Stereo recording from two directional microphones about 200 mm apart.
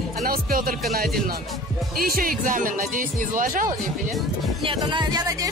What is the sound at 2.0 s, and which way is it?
Speech, 45° right (ahead or behind).